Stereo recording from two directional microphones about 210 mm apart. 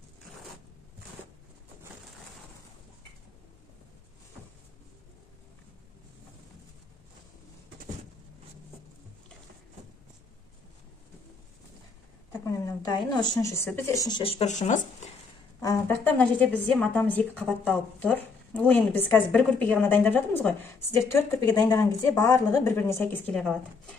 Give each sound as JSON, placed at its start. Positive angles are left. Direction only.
{"t": 12.3, "sound": "a woman's voice", "side_deg": 15}
{"t": 14.0, "sound": "speech", "side_deg": 25}
{"t": 15.6, "sound": "a woman's voice", "side_deg": 10}